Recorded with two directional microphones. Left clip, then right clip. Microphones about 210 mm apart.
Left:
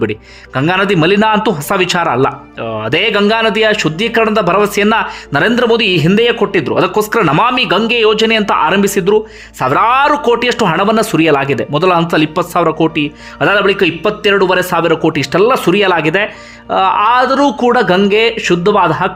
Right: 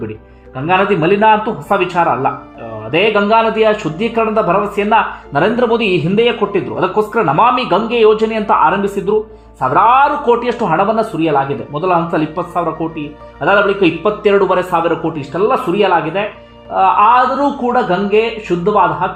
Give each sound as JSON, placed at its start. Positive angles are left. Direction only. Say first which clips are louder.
{"t": 0.5, "sound": "a man's voice", "louder": "left 1 dB", "side_deg": 25}